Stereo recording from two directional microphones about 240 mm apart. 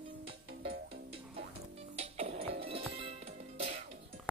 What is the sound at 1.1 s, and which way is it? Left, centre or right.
Music, right.